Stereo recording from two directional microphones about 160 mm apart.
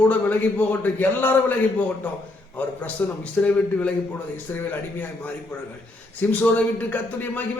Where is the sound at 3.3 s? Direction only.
10° left (ahead or behind).